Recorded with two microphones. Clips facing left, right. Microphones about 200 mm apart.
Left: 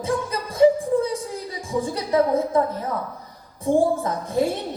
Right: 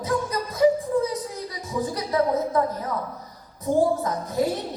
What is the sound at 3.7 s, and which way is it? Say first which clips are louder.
Speech: left 2 dB; 25° left (ahead or behind).